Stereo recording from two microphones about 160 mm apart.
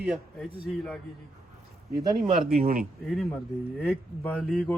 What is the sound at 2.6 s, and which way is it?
Speech, 65° right (ahead or behind).